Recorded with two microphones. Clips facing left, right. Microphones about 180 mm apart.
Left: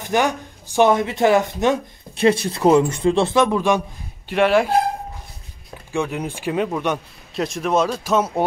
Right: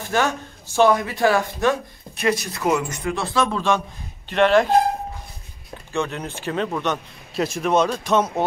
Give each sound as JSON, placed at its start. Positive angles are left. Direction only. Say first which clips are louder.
{"t": 0.0, "sound": "speech", "louder": "left 2 dB", "side_deg": 15}
{"t": 3.5, "sound": "speech", "louder": "left 3 dB", "side_deg": 10}
{"t": 5.9, "sound": "speech", "louder": "left 2 dB", "side_deg": 10}
{"t": 7.3, "sound": "speech", "louder": "even", "side_deg": 0}